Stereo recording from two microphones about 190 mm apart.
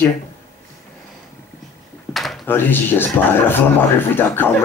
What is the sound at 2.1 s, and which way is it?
Speech, centre (ahead or behind).